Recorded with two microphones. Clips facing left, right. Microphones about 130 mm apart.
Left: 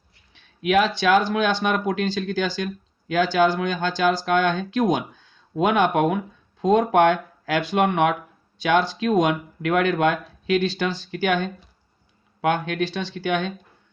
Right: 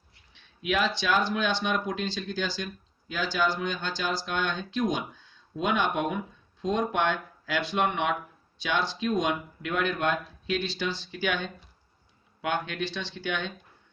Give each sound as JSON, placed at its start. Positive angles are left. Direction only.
{"t": 0.3, "sound": "speech", "side_deg": 60}
{"t": 9.0, "sound": "speech", "side_deg": 60}
{"t": 10.7, "sound": "speech", "side_deg": 50}